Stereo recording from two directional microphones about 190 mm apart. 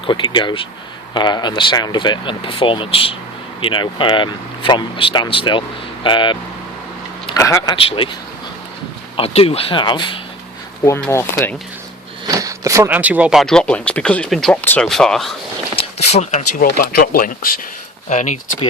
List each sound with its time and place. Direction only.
0.0 s speech: 25° left (ahead or behind)
7.3 s speech: 15° left (ahead or behind)
9.1 s speech: 30° left (ahead or behind)
10.8 s speech: 15° left (ahead or behind)
12.3 s speech: 15° right (ahead or behind); by 15.4 s centre (ahead or behind)
15.7 s a sound: 30° left (ahead or behind)
16.6 s speech: 50° left (ahead or behind)
18.1 s speech: 35° left (ahead or behind)